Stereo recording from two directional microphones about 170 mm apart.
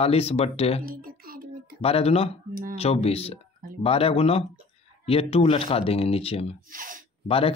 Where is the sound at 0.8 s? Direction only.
60° right (ahead or behind).